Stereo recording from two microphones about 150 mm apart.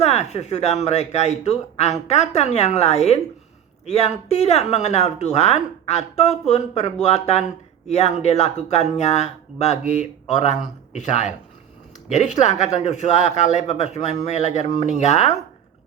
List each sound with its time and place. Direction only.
0.0 s speech: 45° left (ahead or behind)